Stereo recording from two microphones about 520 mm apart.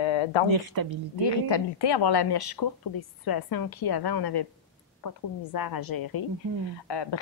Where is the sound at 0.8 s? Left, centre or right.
Right.